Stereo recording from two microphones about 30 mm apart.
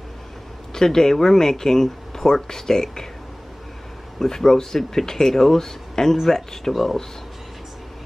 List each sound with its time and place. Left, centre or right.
0.7 s speech: centre
4.2 s speech: centre